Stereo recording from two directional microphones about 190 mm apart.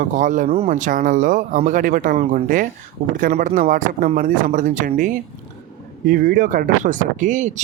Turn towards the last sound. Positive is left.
turn(degrees=-40)  # may be behind; listen again after turning